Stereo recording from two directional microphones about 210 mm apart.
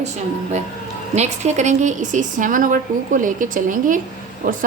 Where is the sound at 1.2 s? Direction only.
35° right (ahead or behind).